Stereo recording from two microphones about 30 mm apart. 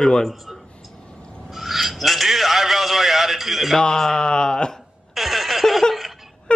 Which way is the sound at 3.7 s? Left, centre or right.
Centre.